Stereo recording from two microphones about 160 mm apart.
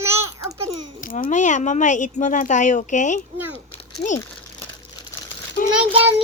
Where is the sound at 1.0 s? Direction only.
60° left (ahead or behind).